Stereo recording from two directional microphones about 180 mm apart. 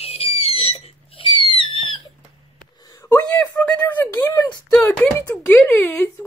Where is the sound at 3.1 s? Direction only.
10° left (ahead or behind).